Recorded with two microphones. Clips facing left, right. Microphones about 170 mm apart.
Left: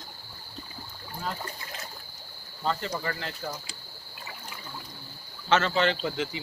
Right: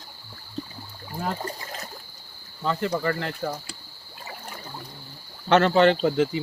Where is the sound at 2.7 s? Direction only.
55° right (ahead or behind).